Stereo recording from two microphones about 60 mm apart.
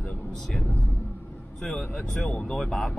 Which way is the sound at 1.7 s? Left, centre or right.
Left.